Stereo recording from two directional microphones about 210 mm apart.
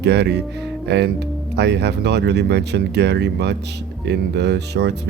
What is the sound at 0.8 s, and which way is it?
Music, 55° right (ahead or behind).